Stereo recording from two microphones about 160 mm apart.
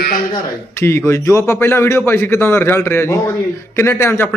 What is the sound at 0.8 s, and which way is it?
A man's voice, 20° left (ahead or behind).